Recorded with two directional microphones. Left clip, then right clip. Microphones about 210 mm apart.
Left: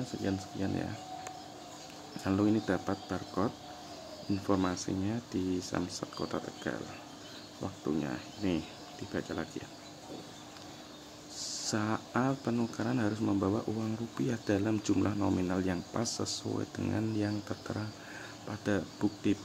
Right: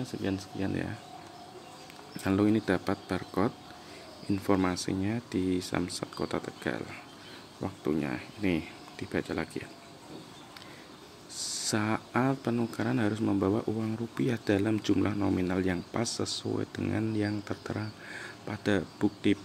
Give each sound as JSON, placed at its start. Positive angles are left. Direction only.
{"t": 0.2, "sound": "speech", "side_deg": -10}
{"t": 2.2, "sound": "speech", "side_deg": -15}
{"t": 11.7, "sound": "speech", "side_deg": -15}